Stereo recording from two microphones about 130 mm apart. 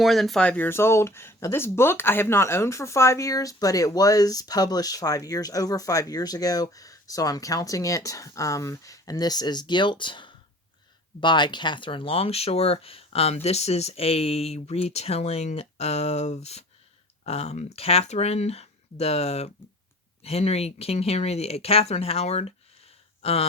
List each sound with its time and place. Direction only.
0.0 s speech: centre (ahead or behind); by 23.5 s 50° left (ahead or behind)